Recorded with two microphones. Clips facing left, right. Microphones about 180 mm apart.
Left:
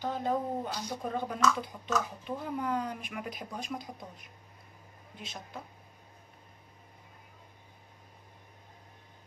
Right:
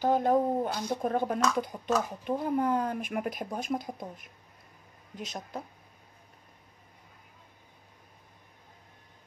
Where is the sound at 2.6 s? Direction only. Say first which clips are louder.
Right 3 dB; 50° right (ahead or behind).